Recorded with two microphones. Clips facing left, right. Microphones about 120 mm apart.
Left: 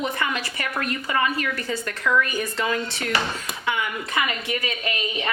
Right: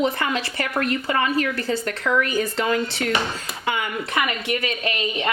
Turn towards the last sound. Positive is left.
turn(degrees=-25)  # may be behind; listen again after turning